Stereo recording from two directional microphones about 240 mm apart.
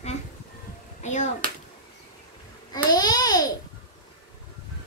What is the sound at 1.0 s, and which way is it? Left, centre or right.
Clapping, left.